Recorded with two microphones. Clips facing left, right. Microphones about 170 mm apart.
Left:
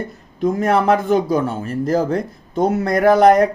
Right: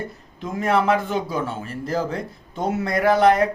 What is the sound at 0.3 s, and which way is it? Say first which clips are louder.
Speech: left 5 dB; 40° left (ahead or behind).